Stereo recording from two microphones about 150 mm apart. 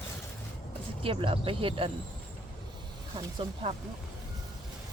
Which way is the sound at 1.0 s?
35° right (ahead or behind).